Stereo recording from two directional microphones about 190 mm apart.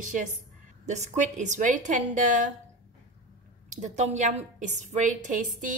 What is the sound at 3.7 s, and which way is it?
A woman's voice, 40° right (ahead or behind).